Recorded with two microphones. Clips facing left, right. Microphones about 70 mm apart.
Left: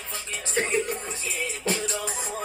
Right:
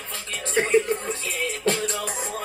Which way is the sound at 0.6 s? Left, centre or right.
Right.